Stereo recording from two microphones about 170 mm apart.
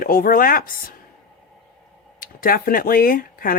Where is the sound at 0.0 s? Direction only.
55° left (ahead or behind).